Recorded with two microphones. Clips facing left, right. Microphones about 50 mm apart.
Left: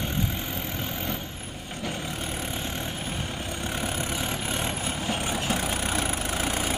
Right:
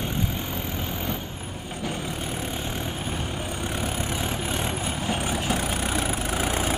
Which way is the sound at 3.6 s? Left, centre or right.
Centre.